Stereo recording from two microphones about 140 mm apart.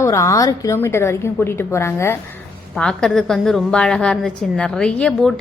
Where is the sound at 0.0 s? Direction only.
20° left (ahead or behind).